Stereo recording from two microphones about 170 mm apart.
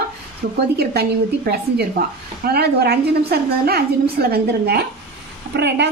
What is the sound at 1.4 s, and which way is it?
A woman's voice, 65° right (ahead or behind).